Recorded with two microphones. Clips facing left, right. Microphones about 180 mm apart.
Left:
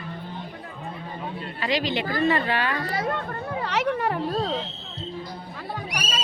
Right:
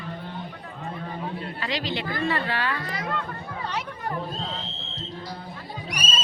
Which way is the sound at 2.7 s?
40° left (ahead or behind).